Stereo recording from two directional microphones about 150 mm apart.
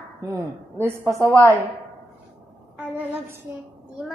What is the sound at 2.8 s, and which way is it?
Speech, 15° right (ahead or behind).